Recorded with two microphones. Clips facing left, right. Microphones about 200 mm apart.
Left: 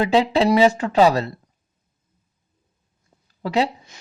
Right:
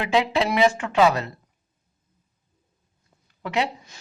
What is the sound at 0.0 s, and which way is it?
Speech, 30° left (ahead or behind).